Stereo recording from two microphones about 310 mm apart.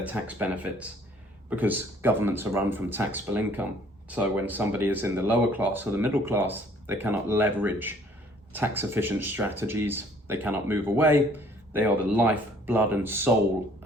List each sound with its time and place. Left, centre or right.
0.0 s speech: centre